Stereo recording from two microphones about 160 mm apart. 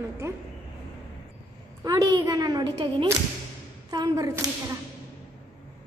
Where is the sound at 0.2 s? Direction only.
15° right (ahead or behind).